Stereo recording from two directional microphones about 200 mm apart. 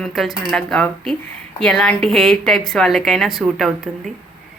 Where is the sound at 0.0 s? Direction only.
Centre (ahead or behind).